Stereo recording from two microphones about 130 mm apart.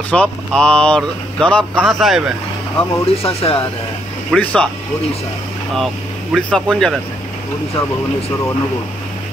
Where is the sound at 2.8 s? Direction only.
45° left (ahead or behind).